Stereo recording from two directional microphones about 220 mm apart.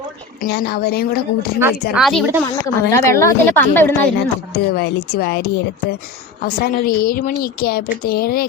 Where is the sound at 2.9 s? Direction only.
10° left (ahead or behind).